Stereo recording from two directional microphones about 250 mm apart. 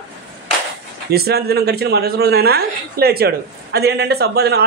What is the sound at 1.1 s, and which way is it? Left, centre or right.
A man's voice, right.